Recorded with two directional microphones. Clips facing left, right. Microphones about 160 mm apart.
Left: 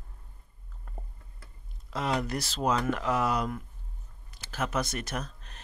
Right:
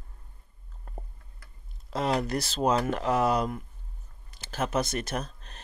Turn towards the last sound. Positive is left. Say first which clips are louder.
# right 3 dB
turn(degrees=-30)  # may be behind; listen again after turning